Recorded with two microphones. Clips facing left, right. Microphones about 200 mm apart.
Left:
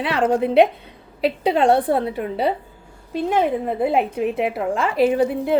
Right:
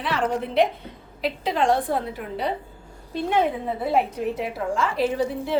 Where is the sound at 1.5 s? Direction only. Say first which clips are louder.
Left 4 dB; 65° left (ahead or behind).